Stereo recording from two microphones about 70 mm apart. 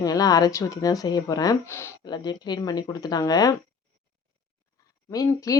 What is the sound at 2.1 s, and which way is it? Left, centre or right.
Speech, left.